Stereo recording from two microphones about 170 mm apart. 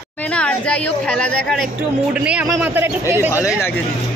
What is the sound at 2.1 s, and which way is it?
Speech, 10° right (ahead or behind).